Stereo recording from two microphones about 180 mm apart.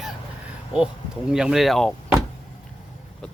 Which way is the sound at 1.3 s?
5° right (ahead or behind).